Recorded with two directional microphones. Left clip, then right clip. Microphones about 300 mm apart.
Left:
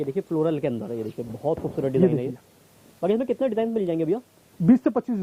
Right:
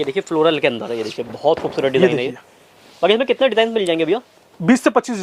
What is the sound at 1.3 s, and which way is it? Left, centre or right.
Speech, right.